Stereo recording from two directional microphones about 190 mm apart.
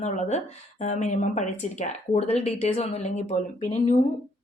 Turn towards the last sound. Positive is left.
turn(degrees=40)  # may be behind; listen again after turning